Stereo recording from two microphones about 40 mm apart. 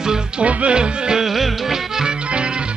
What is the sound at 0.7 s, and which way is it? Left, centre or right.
Music, centre.